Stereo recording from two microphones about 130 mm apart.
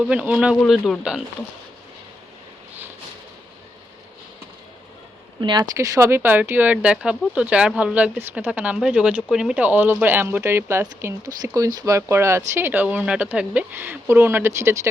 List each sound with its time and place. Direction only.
0.0 s speech: 10° right (ahead or behind)
0.5 s a man's voice: centre (ahead or behind)
5.4 s speech: 35° right (ahead or behind)
5.7 s speech: 25° right (ahead or behind)